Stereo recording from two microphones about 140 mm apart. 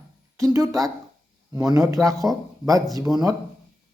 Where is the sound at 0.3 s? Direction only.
25° right (ahead or behind).